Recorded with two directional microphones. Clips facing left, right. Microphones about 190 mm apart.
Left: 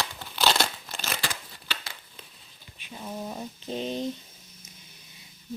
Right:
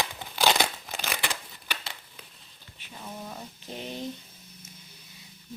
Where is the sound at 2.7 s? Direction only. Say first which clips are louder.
Left 4 dB; 15° left (ahead or behind).